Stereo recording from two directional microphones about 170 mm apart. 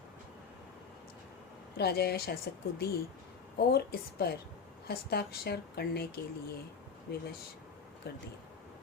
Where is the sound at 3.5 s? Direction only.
70° left (ahead or behind).